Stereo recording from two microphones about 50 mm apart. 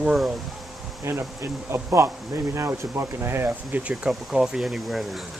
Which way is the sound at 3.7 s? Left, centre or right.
Right.